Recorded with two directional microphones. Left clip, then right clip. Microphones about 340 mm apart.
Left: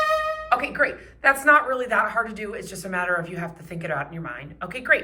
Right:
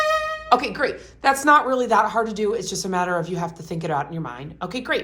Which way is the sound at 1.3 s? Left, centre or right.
Centre.